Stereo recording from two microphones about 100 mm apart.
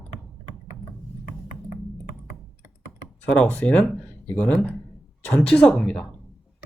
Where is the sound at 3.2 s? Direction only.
10° left (ahead or behind).